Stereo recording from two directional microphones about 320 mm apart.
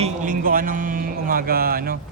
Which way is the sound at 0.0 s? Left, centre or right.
Right.